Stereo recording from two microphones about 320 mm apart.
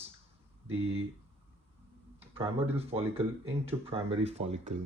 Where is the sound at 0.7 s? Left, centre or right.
Centre.